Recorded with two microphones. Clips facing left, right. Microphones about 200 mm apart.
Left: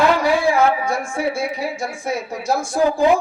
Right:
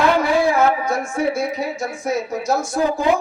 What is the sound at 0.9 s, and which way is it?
Speech, 30° left (ahead or behind).